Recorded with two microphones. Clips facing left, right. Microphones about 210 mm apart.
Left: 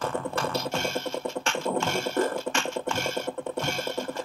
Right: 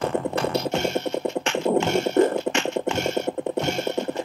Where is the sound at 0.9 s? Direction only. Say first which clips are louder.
Right 6 dB; 65° right (ahead or behind).